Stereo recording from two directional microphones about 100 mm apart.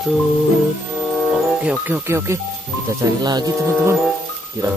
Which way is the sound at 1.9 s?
25° right (ahead or behind).